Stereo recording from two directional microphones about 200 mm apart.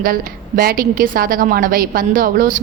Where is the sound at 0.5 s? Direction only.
45° right (ahead or behind).